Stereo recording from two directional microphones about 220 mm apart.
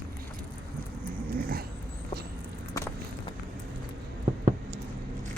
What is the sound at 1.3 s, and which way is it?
Dog, 40° right (ahead or behind).